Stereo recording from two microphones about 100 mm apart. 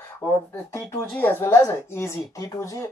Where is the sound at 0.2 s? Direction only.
25° left (ahead or behind).